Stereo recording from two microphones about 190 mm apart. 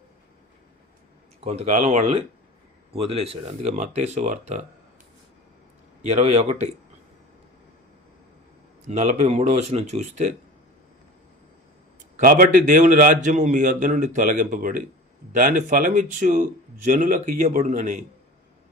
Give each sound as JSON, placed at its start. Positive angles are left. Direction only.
{"t": 1.5, "sound": "speech", "side_deg": -35}
{"t": 6.0, "sound": "speech", "side_deg": -35}
{"t": 8.9, "sound": "speech", "side_deg": -40}
{"t": 12.1, "sound": "a man's voice", "side_deg": -45}